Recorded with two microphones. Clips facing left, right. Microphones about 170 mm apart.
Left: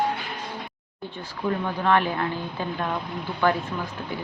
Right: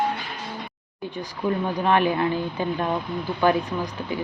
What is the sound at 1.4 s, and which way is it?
Speech, 20° right (ahead or behind).